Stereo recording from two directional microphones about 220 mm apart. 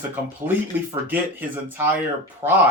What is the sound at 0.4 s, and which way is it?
Speech, 10° right (ahead or behind).